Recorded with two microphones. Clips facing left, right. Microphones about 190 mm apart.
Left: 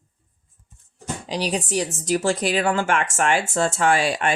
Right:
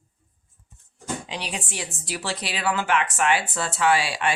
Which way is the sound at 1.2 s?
40° left (ahead or behind).